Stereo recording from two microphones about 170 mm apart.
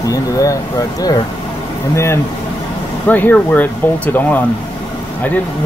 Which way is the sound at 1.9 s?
15° left (ahead or behind).